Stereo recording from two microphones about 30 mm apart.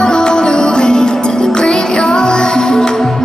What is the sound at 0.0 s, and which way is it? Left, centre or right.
Music, left.